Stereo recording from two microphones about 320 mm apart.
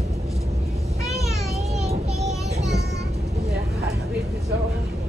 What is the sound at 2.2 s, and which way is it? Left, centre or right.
Child singing, centre.